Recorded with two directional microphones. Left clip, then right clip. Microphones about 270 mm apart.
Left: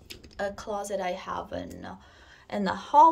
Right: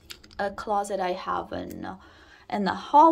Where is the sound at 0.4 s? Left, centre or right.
Centre.